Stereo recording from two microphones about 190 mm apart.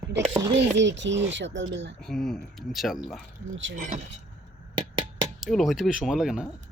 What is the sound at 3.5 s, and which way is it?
Speech, 80° right.